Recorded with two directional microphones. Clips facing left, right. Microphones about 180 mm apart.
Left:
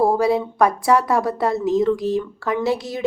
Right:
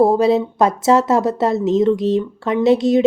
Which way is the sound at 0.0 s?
20° right (ahead or behind).